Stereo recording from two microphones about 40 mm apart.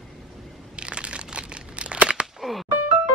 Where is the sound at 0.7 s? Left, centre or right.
Right.